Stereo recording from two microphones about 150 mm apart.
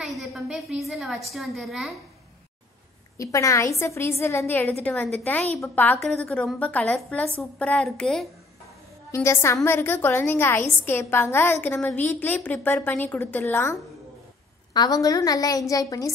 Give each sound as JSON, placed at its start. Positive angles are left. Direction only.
{"t": 0.0, "sound": "a woman's voice", "side_deg": 0}
{"t": 3.2, "sound": "a woman's voice", "side_deg": 20}
{"t": 9.1, "sound": "a woman's voice", "side_deg": 20}